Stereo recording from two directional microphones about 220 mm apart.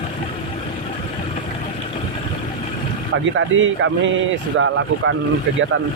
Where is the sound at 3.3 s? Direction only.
65° right (ahead or behind).